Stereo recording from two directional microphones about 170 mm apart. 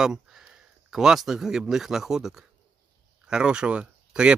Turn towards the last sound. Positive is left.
turn(degrees=-5)  # may be behind; listen again after turning